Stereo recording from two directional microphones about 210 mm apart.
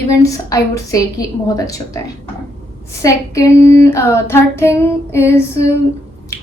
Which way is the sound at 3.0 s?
15° left (ahead or behind).